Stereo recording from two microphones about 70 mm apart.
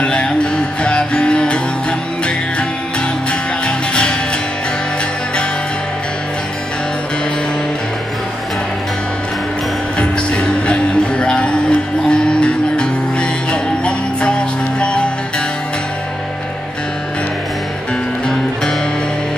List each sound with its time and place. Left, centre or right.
0.0 s music: centre
9.9 s music: centre